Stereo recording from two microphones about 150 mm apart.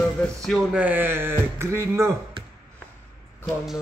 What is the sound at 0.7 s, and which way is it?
Speech, 10° right (ahead or behind).